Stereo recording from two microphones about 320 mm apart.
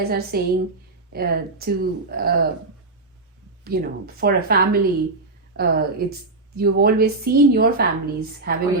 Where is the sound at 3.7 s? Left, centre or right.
Right.